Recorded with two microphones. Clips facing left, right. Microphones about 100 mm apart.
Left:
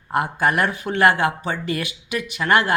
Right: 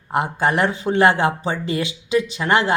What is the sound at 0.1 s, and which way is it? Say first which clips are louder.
Speech: right 1 dB; 25° right (ahead or behind).